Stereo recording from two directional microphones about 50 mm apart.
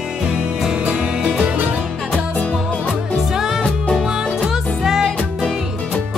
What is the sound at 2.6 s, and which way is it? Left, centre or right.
Music, left.